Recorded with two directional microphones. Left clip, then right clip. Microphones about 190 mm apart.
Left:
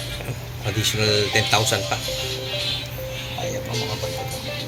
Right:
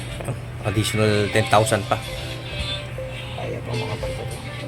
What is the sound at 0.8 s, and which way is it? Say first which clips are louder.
Speech: left 1 dB; 40° right (ahead or behind).